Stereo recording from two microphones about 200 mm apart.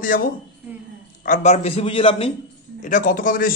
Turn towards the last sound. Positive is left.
turn(degrees=45)  # may be behind; listen again after turning